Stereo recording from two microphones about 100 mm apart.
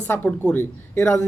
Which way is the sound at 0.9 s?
25° left (ahead or behind).